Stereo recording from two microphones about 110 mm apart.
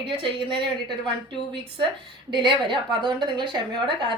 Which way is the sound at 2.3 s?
45° right (ahead or behind).